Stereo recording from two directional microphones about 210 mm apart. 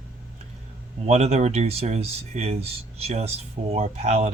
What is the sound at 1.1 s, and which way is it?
Speech, 30° right (ahead or behind).